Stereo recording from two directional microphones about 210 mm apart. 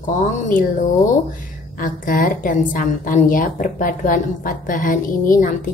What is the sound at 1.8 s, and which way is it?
A woman's voice, 40° left (ahead or behind).